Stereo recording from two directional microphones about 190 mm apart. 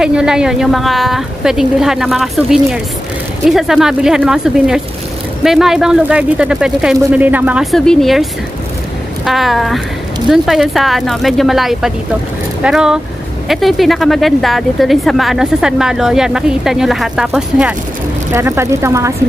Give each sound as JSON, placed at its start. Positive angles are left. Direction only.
{"t": 0.0, "sound": "speech", "side_deg": -5}